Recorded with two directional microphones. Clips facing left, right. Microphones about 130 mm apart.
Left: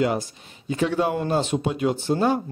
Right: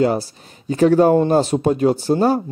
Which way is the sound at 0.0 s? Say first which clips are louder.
Right 5 dB; 35° right (ahead or behind).